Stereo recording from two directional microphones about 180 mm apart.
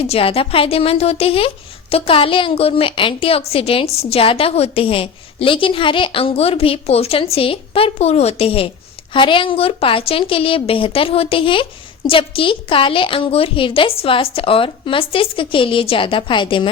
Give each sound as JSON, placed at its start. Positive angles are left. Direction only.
{"t": 0.0, "sound": "a woman's voice", "side_deg": 35}